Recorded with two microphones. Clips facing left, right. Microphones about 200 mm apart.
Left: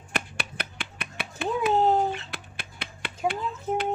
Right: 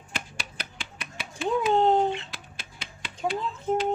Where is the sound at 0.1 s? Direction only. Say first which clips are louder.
Left 5 dB; 60° left (ahead or behind).